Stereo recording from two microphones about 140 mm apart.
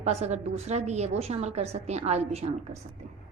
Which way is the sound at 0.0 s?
50° right (ahead or behind).